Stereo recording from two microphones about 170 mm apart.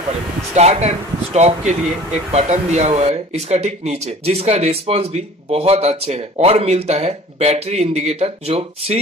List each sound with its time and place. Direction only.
0.6 s speech: 40° right (ahead or behind)